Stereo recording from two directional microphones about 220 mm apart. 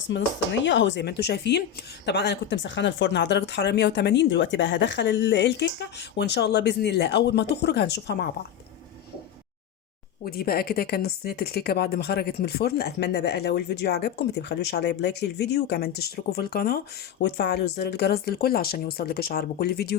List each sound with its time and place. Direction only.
0.1 s speech: 55° left (ahead or behind)
10.2 s speech: 45° left (ahead or behind)